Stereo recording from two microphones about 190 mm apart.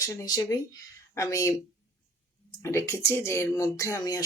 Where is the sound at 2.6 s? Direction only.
15° left (ahead or behind).